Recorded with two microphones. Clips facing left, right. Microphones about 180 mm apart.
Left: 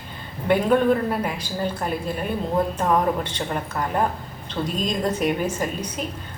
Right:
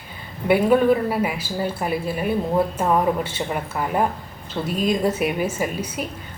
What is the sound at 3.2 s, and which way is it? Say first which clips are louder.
A woman's voice: right 1 dB; 10° right (ahead or behind).